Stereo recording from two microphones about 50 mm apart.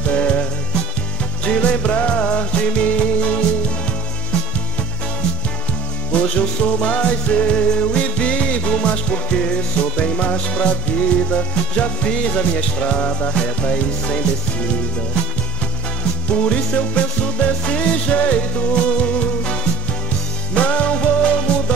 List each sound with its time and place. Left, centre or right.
0.1 s music: left
6.1 s music: left
16.3 s music: left
20.5 s music: left